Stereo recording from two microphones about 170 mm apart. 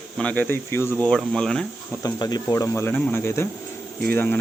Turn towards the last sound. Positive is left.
turn(degrees=10)  # may be behind; listen again after turning